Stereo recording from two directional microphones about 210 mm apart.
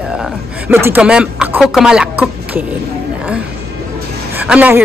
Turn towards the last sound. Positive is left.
turn(degrees=-5)  # may be behind; listen again after turning